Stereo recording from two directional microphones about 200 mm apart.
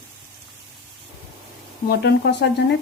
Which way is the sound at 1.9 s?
55° left (ahead or behind).